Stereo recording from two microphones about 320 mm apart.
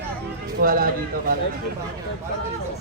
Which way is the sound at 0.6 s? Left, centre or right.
Right.